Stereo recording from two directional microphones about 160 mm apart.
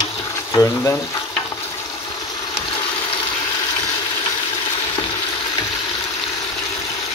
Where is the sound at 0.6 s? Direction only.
20° left (ahead or behind).